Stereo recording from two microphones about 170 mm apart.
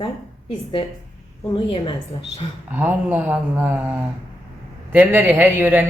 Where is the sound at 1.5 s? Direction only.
30° left (ahead or behind).